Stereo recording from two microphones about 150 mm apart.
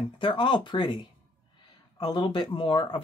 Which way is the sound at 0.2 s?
35° left (ahead or behind).